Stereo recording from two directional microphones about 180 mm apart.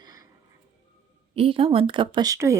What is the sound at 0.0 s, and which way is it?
Music, 20° right (ahead or behind).